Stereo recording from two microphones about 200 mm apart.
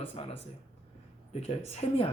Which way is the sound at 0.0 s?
30° left (ahead or behind).